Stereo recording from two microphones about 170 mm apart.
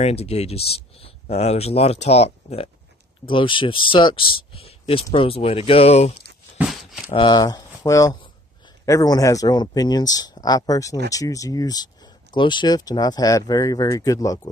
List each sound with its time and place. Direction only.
0.0 s speech: 35° left (ahead or behind)
6.7 s a sound: centre (ahead or behind)
7.2 s speech: 25° left (ahead or behind)